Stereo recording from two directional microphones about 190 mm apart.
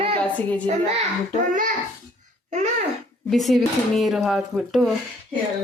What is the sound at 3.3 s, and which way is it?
Speech, centre (ahead or behind).